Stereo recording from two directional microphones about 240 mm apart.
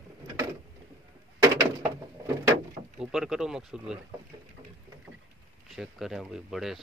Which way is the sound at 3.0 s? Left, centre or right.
Centre.